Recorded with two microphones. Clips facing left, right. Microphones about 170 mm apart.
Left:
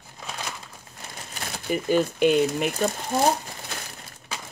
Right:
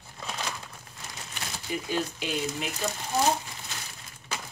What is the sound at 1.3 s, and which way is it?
Speech, 50° left (ahead or behind).